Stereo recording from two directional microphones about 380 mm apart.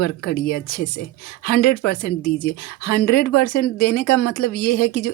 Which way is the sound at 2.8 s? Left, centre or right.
Left.